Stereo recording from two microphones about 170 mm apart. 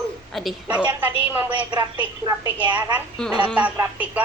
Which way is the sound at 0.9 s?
15° right (ahead or behind).